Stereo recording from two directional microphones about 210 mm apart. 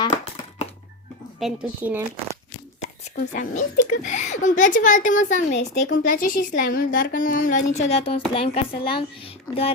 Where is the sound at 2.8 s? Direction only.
35° left (ahead or behind).